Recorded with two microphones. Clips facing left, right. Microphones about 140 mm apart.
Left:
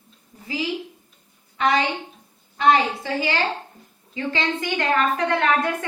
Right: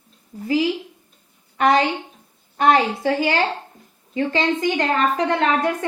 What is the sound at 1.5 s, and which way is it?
A woman's voice, 50° right (ahead or behind).